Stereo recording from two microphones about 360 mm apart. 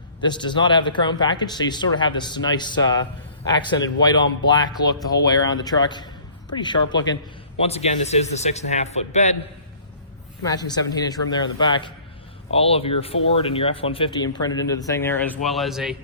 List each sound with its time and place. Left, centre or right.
0.2 s speech: centre
10.4 s speech: centre